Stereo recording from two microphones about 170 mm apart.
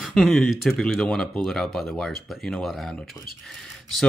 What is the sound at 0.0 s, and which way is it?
Speech, centre (ahead or behind).